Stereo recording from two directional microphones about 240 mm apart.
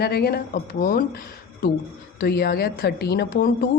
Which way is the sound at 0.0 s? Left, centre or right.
Left.